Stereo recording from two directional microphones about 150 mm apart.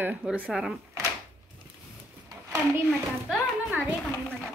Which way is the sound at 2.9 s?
Centre (ahead or behind).